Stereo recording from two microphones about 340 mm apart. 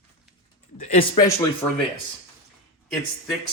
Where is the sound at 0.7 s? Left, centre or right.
Left.